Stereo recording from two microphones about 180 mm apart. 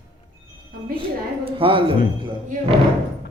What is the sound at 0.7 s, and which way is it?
Speech, 55° right (ahead or behind).